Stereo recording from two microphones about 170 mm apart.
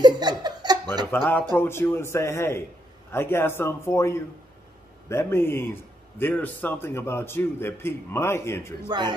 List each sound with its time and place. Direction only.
0.0 s laughter: 25° right (ahead or behind)
1.1 s a man's voice: 10° left (ahead or behind)
8.8 s a man's voice: 25° right (ahead or behind)